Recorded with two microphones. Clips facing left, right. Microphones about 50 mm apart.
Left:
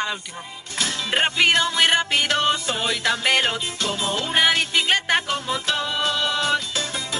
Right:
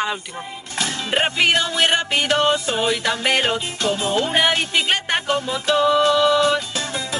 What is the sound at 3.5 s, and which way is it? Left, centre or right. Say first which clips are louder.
Speech: right 4 dB; right.